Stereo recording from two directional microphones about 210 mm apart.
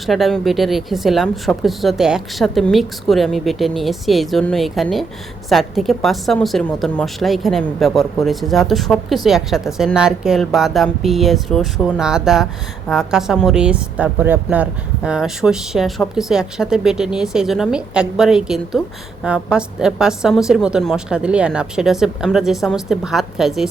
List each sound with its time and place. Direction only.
0.0 s a woman's voice: centre (ahead or behind)